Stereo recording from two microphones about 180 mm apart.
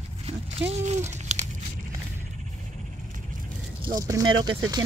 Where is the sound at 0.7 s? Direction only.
40° right (ahead or behind).